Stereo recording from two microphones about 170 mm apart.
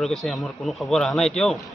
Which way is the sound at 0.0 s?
Centre (ahead or behind).